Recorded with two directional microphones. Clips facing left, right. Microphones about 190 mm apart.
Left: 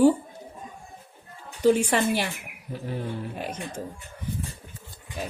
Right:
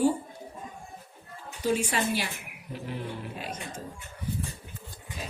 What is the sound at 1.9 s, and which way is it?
Speech, 55° left (ahead or behind).